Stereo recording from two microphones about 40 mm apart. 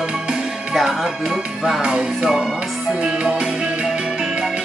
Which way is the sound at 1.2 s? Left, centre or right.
Centre.